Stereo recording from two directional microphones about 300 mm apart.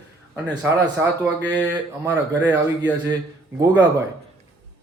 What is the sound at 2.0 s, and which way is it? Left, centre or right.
Speech, centre.